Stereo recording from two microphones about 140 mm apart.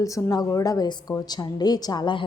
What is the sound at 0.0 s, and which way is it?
A woman's voice, 25° left (ahead or behind).